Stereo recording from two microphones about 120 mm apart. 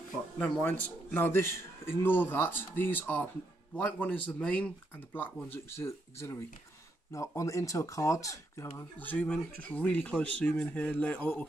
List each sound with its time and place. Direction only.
0.4 s a man's voice: 15° left (ahead or behind)
8.9 s a man's voice: 15° left (ahead or behind)